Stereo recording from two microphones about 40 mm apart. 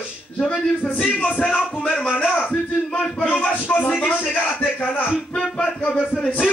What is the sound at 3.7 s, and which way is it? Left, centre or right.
Speech, left.